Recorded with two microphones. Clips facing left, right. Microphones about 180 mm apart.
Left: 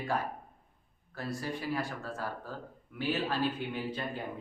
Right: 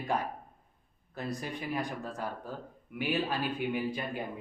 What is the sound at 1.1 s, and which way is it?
A man's voice, 20° right (ahead or behind).